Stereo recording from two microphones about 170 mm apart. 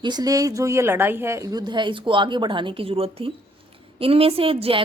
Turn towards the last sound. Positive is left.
turn(degrees=-35)  # may be behind; listen again after turning